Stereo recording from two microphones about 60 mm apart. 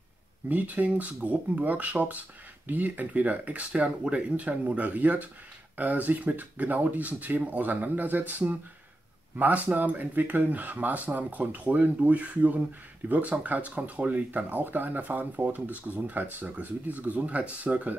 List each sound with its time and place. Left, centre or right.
0.5 s speech: right